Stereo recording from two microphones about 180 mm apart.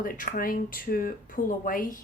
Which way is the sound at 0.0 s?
50° left (ahead or behind).